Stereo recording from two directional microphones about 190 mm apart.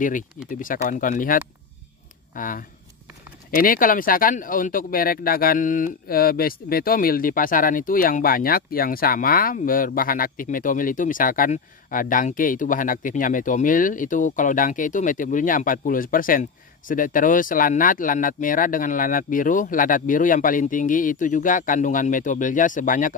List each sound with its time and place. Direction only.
0.5 s speech: 45° left (ahead or behind)